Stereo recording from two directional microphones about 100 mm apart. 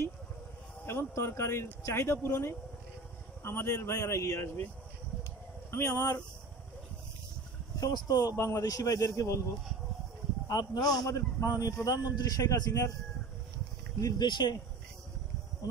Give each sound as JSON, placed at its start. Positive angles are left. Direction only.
{"t": 0.8, "sound": "speech", "side_deg": 25}
{"t": 5.7, "sound": "speech", "side_deg": 25}
{"t": 7.8, "sound": "a man's voice", "side_deg": 40}
{"t": 10.5, "sound": "a man's voice", "side_deg": 40}
{"t": 14.0, "sound": "speech", "side_deg": 45}